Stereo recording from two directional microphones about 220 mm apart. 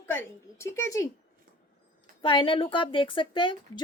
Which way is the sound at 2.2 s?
25° left (ahead or behind).